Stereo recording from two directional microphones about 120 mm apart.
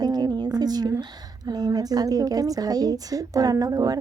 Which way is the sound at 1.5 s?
35° right (ahead or behind).